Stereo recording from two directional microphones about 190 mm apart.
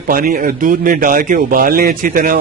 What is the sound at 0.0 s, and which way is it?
A man's voice, 50° right (ahead or behind).